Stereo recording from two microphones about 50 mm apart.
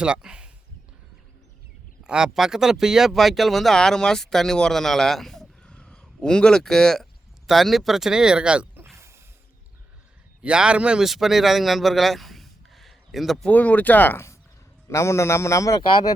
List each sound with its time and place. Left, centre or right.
0.0 s speech: centre
2.0 s speech: centre
3.8 s speech: centre
5.6 s a sound: centre
6.1 s speech: centre
7.4 s speech: centre; by 8.6 s right
9.0 s mechanisms: right
10.4 s speech: right
11.0 s speech: centre
13.5 s speech: left
14.8 s a man's voice: left